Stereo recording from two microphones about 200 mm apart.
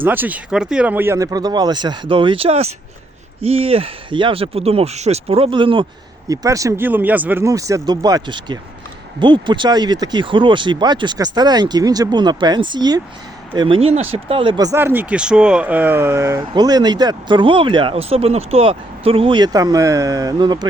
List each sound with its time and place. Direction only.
0.0 s speech: 10° right (ahead or behind)